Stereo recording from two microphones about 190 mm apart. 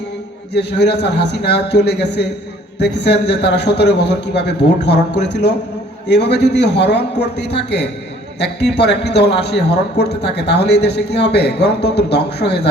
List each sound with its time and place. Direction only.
0.5 s a man's voice: 60° left (ahead or behind)